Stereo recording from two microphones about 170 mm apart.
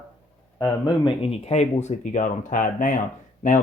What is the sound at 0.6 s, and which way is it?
Speech, 25° left (ahead or behind).